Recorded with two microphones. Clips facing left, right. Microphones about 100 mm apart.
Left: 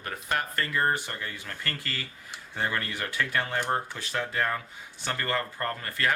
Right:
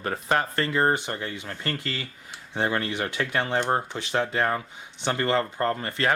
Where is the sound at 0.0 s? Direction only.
30° right (ahead or behind).